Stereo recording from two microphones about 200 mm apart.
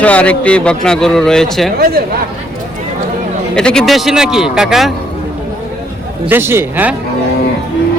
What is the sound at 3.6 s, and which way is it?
A man's voice, 5° left (ahead or behind).